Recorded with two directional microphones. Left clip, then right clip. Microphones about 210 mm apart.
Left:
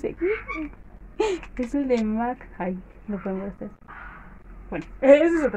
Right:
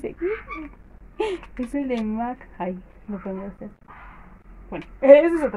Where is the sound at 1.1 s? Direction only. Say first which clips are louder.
Left 2 dB; 25° left (ahead or behind).